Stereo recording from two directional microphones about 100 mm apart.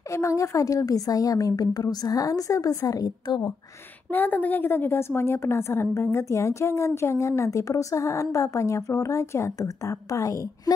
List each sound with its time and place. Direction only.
0.1 s a woman's voice: 30° left (ahead or behind)
4.1 s a woman's voice: 20° left (ahead or behind); by 10.3 s 35° left (ahead or behind)